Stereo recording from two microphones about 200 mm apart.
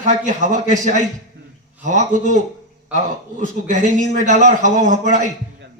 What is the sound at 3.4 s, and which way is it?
A man's voice, 40° right (ahead or behind).